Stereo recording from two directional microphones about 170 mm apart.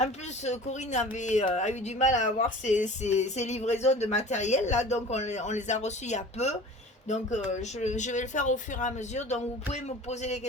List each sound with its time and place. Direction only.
0.0 s speech: 45° left (ahead or behind)